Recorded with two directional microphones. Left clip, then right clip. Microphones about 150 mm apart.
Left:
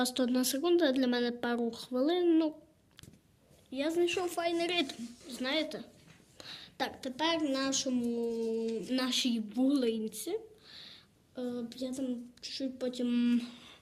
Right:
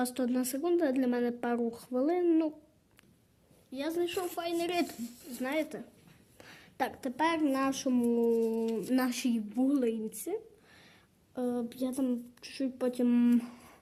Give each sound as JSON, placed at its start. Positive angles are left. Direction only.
{"t": 0.0, "sound": "a woman's voice", "side_deg": -5}
{"t": 3.7, "sound": "a woman's voice", "side_deg": 0}
{"t": 4.4, "sound": "a woman's voice", "side_deg": -15}
{"t": 6.3, "sound": "a sound", "side_deg": -10}
{"t": 7.2, "sound": "a sound", "side_deg": -55}
{"t": 9.0, "sound": "a woman's voice", "side_deg": -20}
{"t": 10.2, "sound": "a sound", "side_deg": -25}
{"t": 11.3, "sound": "speech", "side_deg": -45}
{"t": 11.9, "sound": "speech", "side_deg": -65}